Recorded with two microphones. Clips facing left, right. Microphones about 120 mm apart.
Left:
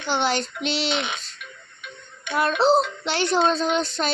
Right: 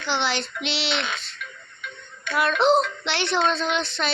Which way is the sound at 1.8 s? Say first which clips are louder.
Right 3 dB; 15° left (ahead or behind).